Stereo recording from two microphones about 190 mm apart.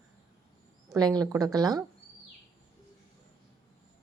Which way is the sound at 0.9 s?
20° right (ahead or behind).